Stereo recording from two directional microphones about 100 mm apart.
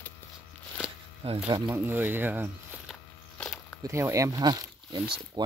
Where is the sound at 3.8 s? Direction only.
30° right (ahead or behind); by 5.4 s 55° right (ahead or behind).